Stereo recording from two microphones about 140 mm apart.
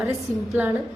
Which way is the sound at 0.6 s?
15° right (ahead or behind).